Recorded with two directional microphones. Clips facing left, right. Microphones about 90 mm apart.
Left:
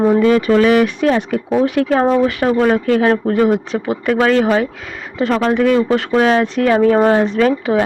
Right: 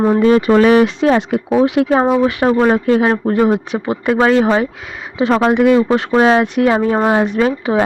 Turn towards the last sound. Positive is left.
turn(degrees=-10)  # may be behind; listen again after turning